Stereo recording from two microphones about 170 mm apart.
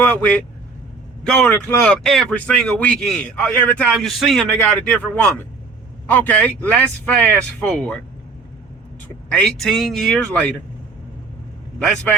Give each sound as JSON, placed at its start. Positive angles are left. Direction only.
{"t": 0.0, "sound": "speech", "side_deg": 10}
{"t": 9.3, "sound": "speech", "side_deg": 5}